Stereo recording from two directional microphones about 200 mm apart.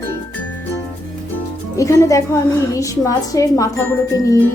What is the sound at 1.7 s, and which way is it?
Speech, 15° left (ahead or behind).